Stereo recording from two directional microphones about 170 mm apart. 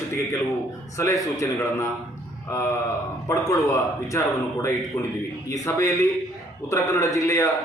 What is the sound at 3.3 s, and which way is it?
A man's voice, 20° left (ahead or behind).